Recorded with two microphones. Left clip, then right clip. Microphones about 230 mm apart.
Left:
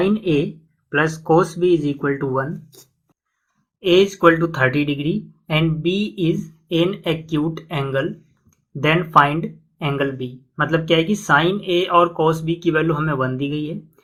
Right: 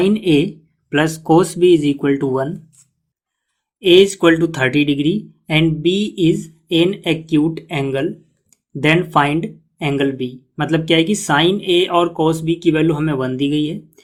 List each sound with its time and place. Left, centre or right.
0.0 s speech: right
3.8 s speech: right